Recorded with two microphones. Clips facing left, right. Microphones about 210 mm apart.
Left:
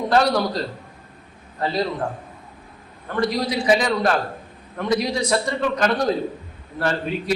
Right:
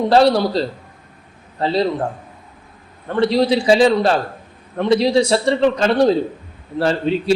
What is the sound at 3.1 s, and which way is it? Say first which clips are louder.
A man's voice: right 7 dB; 30° right (ahead or behind).